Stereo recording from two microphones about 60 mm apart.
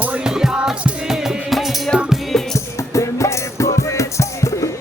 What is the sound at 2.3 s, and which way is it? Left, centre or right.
Music, centre.